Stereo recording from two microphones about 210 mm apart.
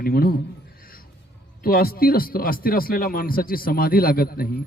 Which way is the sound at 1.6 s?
45° left (ahead or behind).